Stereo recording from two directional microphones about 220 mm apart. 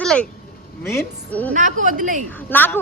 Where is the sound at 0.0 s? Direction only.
5° left (ahead or behind).